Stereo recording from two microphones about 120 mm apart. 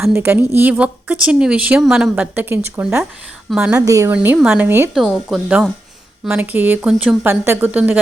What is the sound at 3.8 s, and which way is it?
Speech, 25° right (ahead or behind).